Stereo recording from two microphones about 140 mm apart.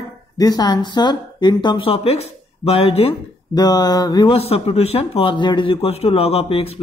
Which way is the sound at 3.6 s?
30° left (ahead or behind).